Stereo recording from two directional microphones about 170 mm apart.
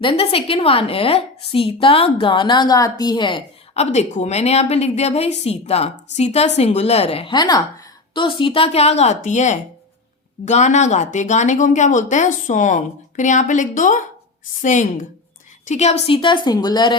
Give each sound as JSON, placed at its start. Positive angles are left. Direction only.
{"t": 0.0, "sound": "a woman's voice", "side_deg": 35}
{"t": 3.8, "sound": "a woman's voice", "side_deg": 40}